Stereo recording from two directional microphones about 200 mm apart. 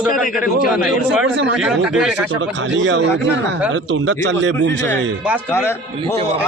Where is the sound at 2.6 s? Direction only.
65° right (ahead or behind).